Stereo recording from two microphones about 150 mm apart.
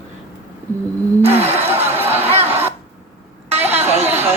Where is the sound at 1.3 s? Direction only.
15° right (ahead or behind).